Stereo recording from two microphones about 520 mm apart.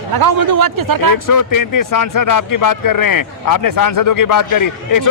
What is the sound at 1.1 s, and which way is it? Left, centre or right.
Speech, left.